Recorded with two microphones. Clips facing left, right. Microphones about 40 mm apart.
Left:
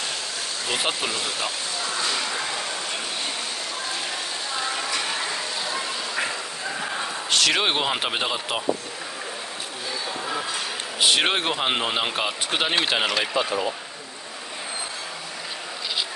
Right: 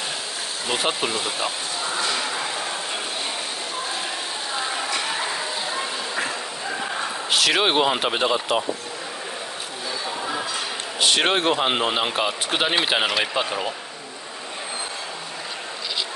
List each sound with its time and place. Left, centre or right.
0.7 s speech: centre
5.3 s a sound: centre
6.8 s a man's voice: centre
11.0 s speech: centre